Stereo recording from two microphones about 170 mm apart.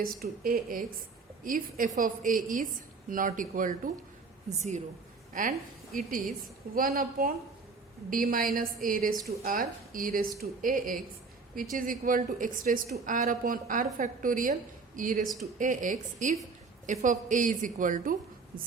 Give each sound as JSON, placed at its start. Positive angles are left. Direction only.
{"t": 0.0, "sound": "a woman's voice", "side_deg": -60}
{"t": 5.3, "sound": "a woman's voice", "side_deg": -50}